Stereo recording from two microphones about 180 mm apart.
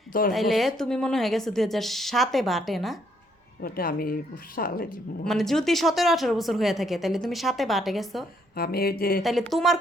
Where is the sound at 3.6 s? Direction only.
55° left (ahead or behind).